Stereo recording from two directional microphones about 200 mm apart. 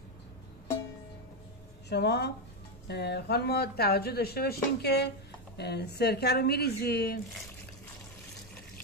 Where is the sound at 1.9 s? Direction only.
55° left (ahead or behind).